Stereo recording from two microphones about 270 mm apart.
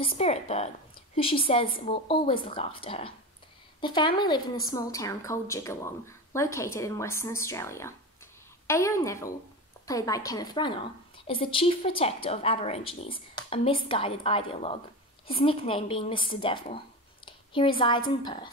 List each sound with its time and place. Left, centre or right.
0.0 s a woman's voice: left